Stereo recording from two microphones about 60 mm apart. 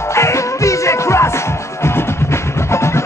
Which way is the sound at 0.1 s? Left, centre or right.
Left.